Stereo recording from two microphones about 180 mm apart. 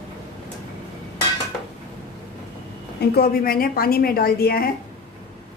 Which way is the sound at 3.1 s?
60° left (ahead or behind).